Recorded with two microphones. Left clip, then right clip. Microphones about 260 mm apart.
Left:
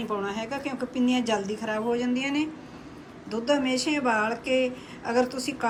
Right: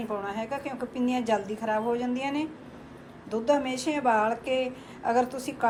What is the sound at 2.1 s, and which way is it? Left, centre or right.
Speech, right.